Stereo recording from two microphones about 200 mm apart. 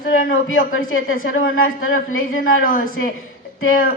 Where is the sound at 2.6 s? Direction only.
45° left (ahead or behind).